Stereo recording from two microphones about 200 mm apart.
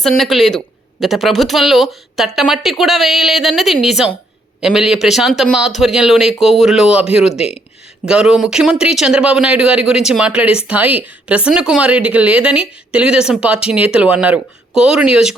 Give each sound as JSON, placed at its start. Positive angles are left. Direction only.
{"t": 0.2, "sound": "speech", "side_deg": 0}